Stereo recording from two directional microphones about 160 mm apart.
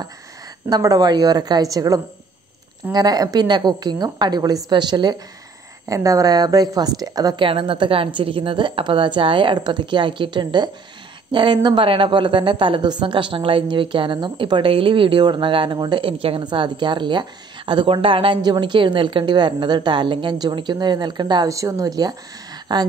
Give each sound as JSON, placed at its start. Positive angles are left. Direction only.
{"t": 0.7, "sound": "a woman's voice", "side_deg": -25}